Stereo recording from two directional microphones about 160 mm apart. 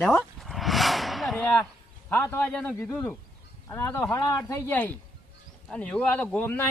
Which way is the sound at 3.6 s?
15° left (ahead or behind).